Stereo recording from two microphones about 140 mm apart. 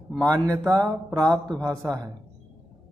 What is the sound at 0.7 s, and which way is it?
Speech, 25° right (ahead or behind).